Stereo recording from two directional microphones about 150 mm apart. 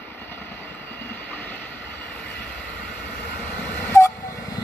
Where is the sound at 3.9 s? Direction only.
20° left (ahead or behind).